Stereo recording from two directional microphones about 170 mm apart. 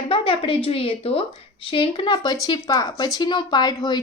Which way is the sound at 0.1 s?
30° left (ahead or behind).